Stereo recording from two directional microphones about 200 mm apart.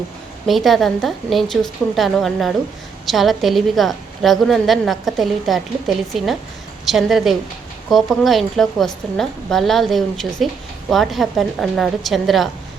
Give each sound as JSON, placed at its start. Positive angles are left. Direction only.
{"t": 0.4, "sound": "a woman's voice", "side_deg": 0}
{"t": 6.8, "sound": "a woman's voice", "side_deg": 0}